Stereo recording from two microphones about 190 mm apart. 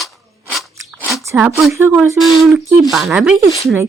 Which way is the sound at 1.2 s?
5° right (ahead or behind).